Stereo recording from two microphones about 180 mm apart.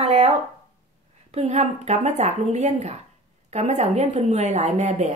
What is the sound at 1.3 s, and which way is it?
A woman's voice, 35° right (ahead or behind).